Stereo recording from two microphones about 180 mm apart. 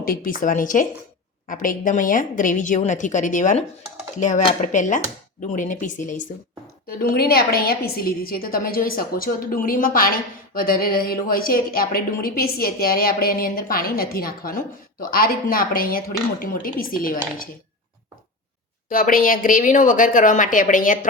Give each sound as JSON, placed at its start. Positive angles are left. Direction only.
{"t": 0.0, "sound": "a woman's voice", "side_deg": 50}
{"t": 18.9, "sound": "speech", "side_deg": 50}